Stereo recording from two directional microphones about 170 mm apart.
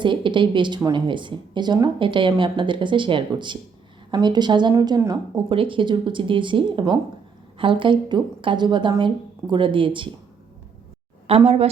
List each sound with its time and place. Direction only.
0.0 s a woman's voice: 30° right (ahead or behind)
5.5 s a woman's voice: 30° right (ahead or behind)
11.3 s a woman's voice: 35° right (ahead or behind)